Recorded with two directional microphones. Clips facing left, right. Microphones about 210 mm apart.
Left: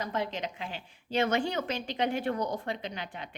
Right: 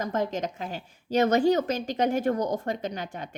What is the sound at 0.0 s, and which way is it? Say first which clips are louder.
A woman's voice: right 5 dB; 45° right (ahead or behind).